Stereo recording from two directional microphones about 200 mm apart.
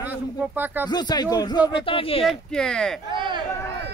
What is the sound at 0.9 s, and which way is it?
Speech, 20° left (ahead or behind).